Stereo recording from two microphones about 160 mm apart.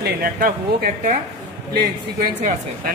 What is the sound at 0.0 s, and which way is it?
Speech, 65° right (ahead or behind).